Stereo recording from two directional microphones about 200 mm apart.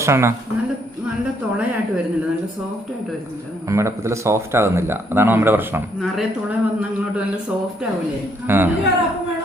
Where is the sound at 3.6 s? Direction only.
15° right (ahead or behind).